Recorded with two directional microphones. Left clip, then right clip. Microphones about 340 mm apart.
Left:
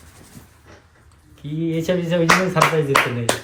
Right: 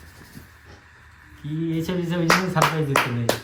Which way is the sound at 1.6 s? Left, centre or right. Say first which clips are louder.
Left 6 dB; centre.